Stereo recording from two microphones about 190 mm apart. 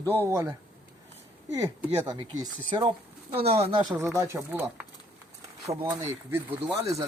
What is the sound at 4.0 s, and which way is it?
Speech, 15° right (ahead or behind).